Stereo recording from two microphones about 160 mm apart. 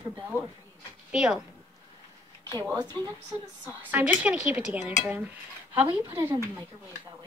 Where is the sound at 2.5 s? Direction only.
25° right (ahead or behind).